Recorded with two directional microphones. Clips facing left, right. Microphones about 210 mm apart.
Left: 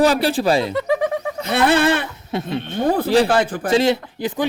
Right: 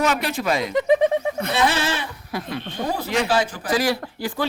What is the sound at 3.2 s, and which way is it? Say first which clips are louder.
Speech: left 4 dB; 55° left (ahead or behind).